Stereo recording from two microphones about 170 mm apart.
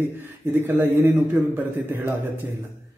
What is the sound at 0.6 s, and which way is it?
A man's voice, 10° right (ahead or behind).